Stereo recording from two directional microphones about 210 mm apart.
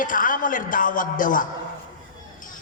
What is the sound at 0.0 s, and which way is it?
A man's voice, 40° left (ahead or behind).